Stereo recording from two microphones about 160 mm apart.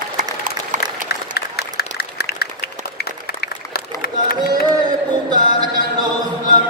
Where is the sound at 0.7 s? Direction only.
50° right (ahead or behind).